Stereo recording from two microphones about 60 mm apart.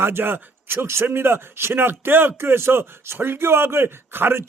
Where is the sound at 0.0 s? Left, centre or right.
Right.